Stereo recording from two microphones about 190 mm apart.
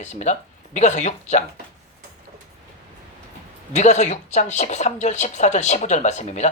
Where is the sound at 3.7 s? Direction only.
35° left (ahead or behind).